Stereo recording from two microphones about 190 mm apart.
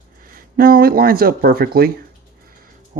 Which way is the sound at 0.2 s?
50° right (ahead or behind).